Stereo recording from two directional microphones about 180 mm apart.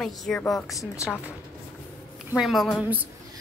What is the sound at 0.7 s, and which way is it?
Speech, 15° left (ahead or behind).